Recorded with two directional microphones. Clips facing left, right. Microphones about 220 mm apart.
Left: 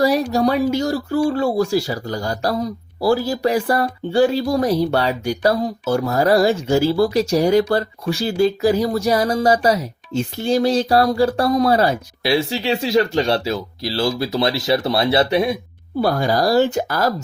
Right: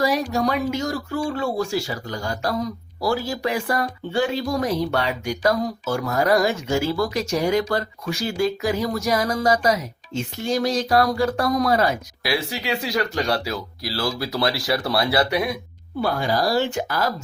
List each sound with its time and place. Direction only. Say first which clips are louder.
0.0 s speech: left 5 dB; 35° left (ahead or behind)
16.0 s speech: left 4 dB; 40° left (ahead or behind)